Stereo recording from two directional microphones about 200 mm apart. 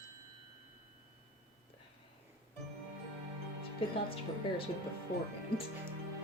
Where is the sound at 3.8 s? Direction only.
25° left (ahead or behind).